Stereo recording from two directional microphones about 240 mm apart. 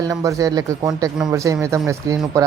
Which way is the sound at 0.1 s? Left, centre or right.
Centre.